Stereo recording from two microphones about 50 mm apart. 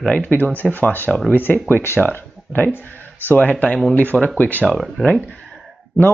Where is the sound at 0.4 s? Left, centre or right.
Left.